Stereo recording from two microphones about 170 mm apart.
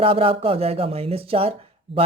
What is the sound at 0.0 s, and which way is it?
A woman's voice, 35° right (ahead or behind).